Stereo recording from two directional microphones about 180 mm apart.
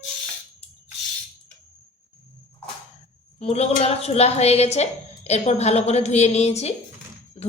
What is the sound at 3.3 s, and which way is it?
A woman's voice, 35° left (ahead or behind).